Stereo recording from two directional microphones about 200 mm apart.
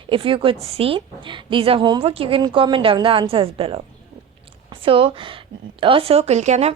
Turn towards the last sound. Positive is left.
turn(degrees=-35)  # may be behind; listen again after turning